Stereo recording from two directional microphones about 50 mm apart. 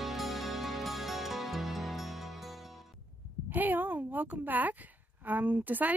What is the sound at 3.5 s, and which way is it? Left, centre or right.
Speech, right.